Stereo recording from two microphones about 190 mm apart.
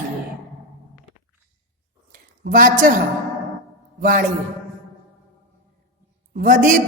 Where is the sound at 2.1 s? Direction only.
45° right (ahead or behind).